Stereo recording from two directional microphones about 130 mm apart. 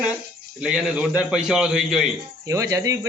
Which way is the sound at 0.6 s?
5° right (ahead or behind).